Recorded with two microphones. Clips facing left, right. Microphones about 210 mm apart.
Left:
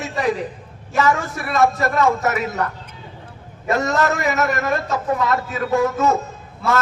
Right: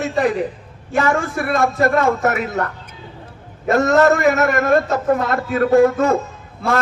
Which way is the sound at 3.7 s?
55° right (ahead or behind).